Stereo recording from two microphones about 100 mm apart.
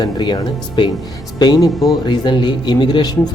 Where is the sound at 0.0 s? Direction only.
40° left (ahead or behind).